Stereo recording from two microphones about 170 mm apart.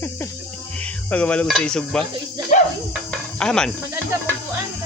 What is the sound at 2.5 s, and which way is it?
Music, 45° left (ahead or behind).